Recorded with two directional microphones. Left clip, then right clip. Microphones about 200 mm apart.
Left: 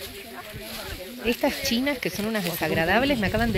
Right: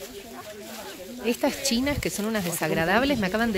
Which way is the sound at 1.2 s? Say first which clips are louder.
Left 1 dB; centre (ahead or behind).